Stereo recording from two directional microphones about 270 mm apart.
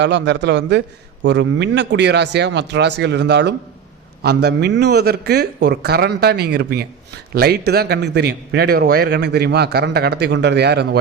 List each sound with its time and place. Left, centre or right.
0.0 s a man's voice: right